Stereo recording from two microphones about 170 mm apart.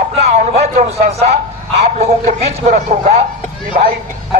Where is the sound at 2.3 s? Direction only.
45° right (ahead or behind).